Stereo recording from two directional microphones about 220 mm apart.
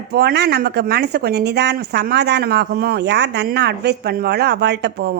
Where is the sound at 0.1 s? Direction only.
45° right (ahead or behind).